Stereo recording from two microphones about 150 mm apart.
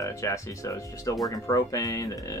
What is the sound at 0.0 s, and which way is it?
Speech, 20° left (ahead or behind).